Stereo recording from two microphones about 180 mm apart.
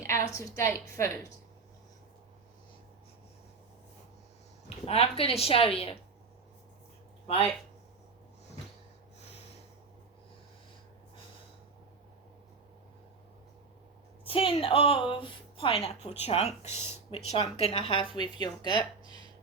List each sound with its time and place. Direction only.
0.0 s a sound: 15° left (ahead or behind)
0.3 s a woman's voice: 15° left (ahead or behind)
4.9 s a woman's voice: 35° left (ahead or behind)
14.3 s a woman's voice: 30° left (ahead or behind)
16.7 s speech: 15° right (ahead or behind)
17.1 s speech: 35° left (ahead or behind)